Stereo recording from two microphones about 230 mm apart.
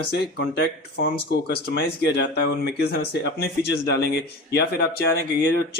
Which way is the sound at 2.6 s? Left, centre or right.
Left.